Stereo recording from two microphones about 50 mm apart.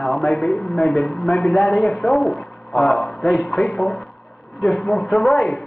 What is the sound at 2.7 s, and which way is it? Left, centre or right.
Speech, left.